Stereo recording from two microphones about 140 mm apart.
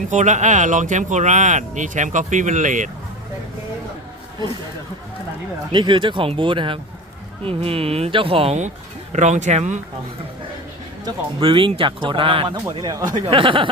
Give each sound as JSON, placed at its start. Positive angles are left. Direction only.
{"t": 0.1, "sound": "speech", "side_deg": -60}
{"t": 5.7, "sound": "speech", "side_deg": -35}
{"t": 9.1, "sound": "speech", "side_deg": -60}
{"t": 11.0, "sound": "speech", "side_deg": -35}